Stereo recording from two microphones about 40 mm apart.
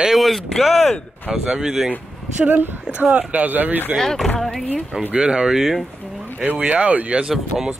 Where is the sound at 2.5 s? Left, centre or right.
Right.